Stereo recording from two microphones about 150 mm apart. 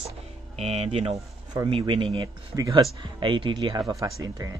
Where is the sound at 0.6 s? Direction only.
45° right (ahead or behind).